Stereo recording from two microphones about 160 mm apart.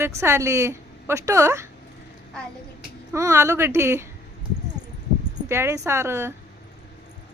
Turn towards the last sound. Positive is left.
turn(degrees=-15)  # may be behind; listen again after turning